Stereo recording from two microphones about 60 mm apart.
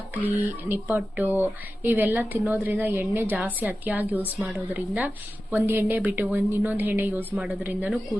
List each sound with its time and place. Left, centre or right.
0.1 s speech: right